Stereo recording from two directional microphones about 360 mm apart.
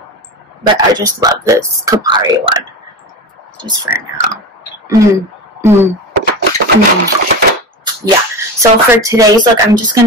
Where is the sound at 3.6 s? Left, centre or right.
Centre.